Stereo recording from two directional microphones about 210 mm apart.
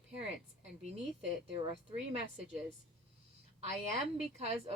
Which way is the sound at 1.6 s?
25° right (ahead or behind).